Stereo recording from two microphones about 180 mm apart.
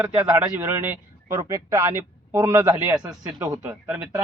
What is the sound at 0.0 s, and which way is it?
Speech, 10° right (ahead or behind).